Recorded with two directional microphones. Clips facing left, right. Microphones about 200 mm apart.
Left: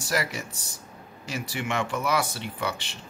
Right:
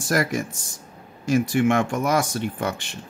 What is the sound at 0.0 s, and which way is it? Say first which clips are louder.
Speech: right 6 dB; 50° right (ahead or behind).